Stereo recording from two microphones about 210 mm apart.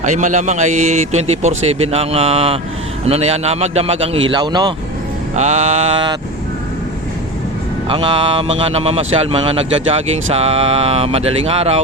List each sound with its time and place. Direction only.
0.0 s a man's voice: 35° right (ahead or behind); by 4.7 s 20° right (ahead or behind)
5.3 s a man's voice: 30° right (ahead or behind)
7.9 s speech: 25° right (ahead or behind)